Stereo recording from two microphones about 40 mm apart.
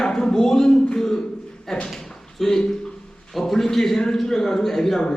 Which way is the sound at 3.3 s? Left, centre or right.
Centre.